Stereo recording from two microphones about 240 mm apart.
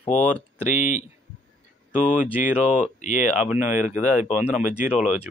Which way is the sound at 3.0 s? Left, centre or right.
Left.